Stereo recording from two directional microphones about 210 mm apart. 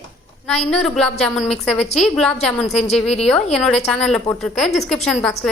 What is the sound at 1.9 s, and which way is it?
Speech, 30° left (ahead or behind).